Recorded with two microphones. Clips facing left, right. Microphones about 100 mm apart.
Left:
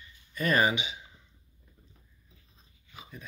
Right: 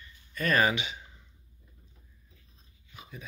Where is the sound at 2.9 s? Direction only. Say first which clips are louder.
Right 1 dB; centre (ahead or behind).